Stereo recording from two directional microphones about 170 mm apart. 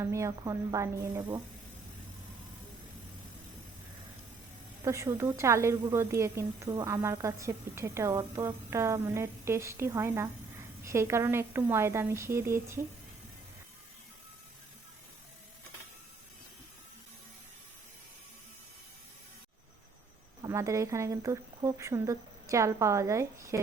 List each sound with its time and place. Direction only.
0.0 s a woman's voice: 15° right (ahead or behind)
4.9 s a woman's voice: 15° right (ahead or behind)
20.4 s a woman's voice: 20° right (ahead or behind)